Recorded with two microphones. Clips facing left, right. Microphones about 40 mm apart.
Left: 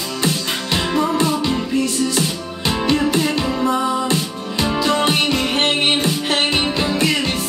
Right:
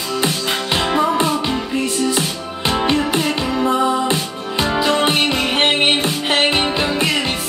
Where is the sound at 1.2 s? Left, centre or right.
Right.